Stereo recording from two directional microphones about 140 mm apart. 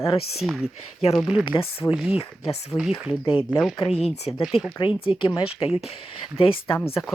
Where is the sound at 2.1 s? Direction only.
45° left (ahead or behind).